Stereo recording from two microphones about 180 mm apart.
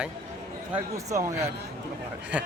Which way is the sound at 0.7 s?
15° right (ahead or behind).